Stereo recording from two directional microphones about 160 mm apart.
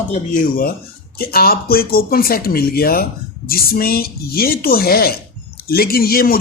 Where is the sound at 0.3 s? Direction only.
65° left (ahead or behind).